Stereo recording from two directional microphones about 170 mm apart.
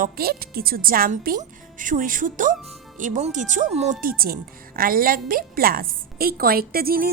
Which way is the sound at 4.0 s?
60° right (ahead or behind).